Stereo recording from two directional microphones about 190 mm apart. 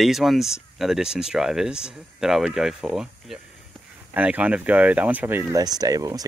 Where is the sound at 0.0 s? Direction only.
Centre (ahead or behind).